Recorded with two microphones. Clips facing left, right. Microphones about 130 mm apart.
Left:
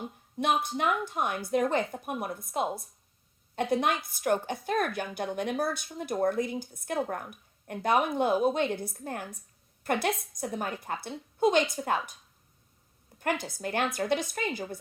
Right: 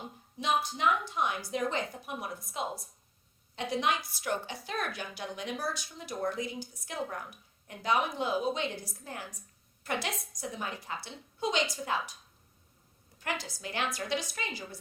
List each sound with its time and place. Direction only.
0.3 s a woman's voice: 55° left (ahead or behind)
13.1 s a woman's voice: 50° left (ahead or behind)